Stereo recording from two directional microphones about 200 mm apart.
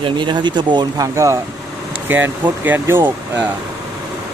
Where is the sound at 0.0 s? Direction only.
25° right (ahead or behind).